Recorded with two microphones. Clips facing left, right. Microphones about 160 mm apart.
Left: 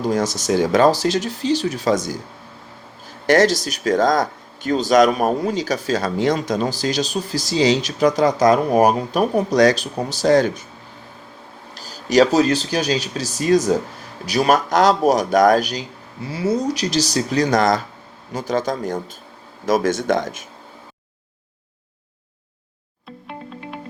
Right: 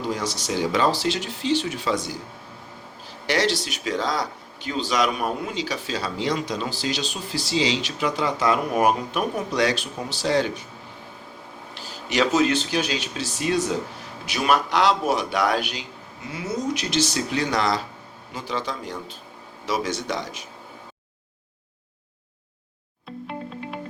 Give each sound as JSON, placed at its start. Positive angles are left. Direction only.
{"t": 0.0, "sound": "speech", "side_deg": 45}
{"t": 3.2, "sound": "speech", "side_deg": 45}
{"t": 11.7, "sound": "a man's voice", "side_deg": 40}